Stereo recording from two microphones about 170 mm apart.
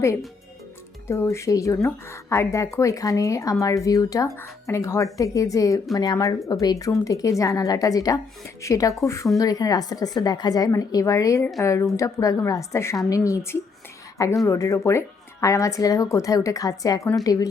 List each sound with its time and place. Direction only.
1.0 s speech: 15° left (ahead or behind)